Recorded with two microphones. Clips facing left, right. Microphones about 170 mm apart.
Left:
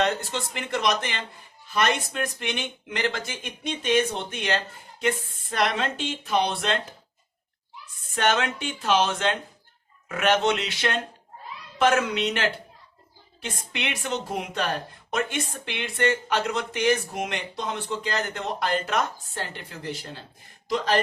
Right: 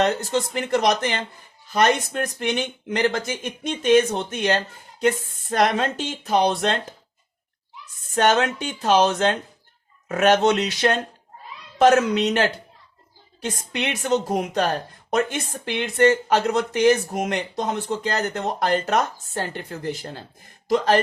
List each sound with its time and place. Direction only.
0.0 s a woman's voice: 40° right (ahead or behind)
8.1 s a woman's voice: 40° right (ahead or behind)